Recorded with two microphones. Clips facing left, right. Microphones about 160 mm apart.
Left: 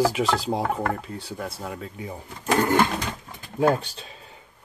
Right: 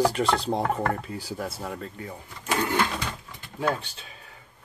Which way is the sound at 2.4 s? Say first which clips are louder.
Left 5 dB; 50° left (ahead or behind).